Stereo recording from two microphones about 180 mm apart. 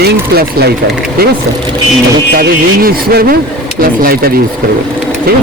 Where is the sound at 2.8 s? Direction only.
60° right (ahead or behind).